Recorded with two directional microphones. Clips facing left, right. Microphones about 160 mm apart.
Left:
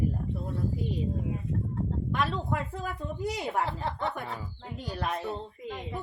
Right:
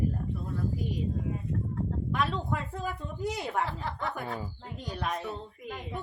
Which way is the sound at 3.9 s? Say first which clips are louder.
Left 3 dB; 30° left (ahead or behind).